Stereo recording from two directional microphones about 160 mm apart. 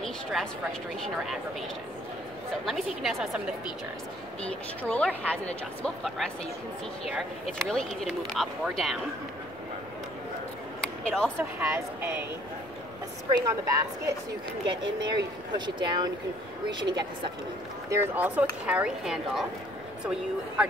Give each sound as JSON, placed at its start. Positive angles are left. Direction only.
{"t": 0.0, "sound": "speech", "side_deg": 0}
{"t": 2.6, "sound": "speech", "side_deg": 0}
{"t": 4.5, "sound": "speech", "side_deg": 10}
{"t": 11.1, "sound": "speech", "side_deg": 5}
{"t": 11.3, "sound": "speech", "side_deg": -15}
{"t": 13.3, "sound": "speech", "side_deg": -20}
{"t": 17.8, "sound": "speech", "side_deg": -15}